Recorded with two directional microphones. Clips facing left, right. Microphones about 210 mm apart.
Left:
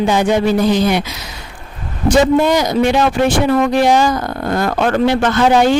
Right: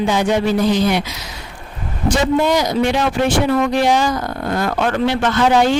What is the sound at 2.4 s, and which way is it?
A man's voice, 50° left (ahead or behind).